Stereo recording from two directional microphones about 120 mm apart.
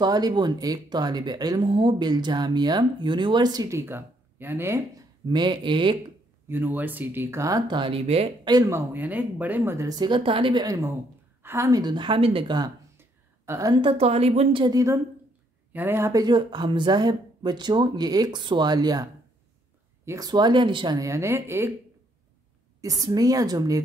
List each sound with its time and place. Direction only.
0.0 s speech: 35° right (ahead or behind); by 4.7 s 20° right (ahead or behind)
5.2 s speech: 40° right (ahead or behind)
6.5 s speech: 15° right (ahead or behind); by 8.3 s 55° right (ahead or behind)
8.5 s speech: 30° right (ahead or behind)
9.8 s speech: 35° right (ahead or behind)
11.4 s speech: 25° right (ahead or behind)
13.5 s a woman's voice: 25° right (ahead or behind)
13.7 s a woman's voice: 50° right (ahead or behind)
14.6 s speech: 30° right (ahead or behind)
15.7 s speech: 20° right (ahead or behind); by 19.0 s 35° right (ahead or behind)
20.1 s speech: 35° right (ahead or behind)
22.8 s speech: 30° right (ahead or behind)